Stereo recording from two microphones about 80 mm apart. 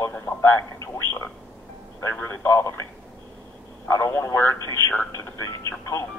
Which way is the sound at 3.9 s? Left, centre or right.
Left.